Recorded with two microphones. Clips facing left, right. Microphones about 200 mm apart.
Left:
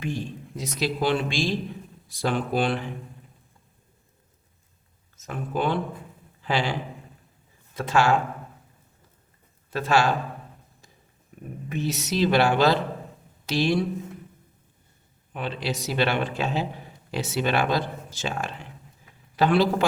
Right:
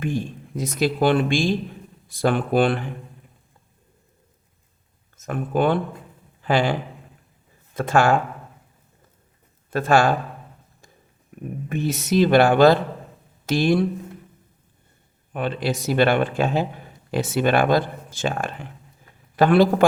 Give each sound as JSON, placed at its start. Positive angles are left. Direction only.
{"t": 0.0, "sound": "speech", "side_deg": -50}
{"t": 5.1, "sound": "speech", "side_deg": -55}
{"t": 9.6, "sound": "speech", "side_deg": -50}
{"t": 11.7, "sound": "speech", "side_deg": -55}
{"t": 15.3, "sound": "speech", "side_deg": -50}